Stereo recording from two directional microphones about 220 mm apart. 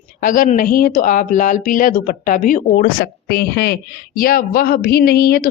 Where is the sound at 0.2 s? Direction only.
40° left (ahead or behind).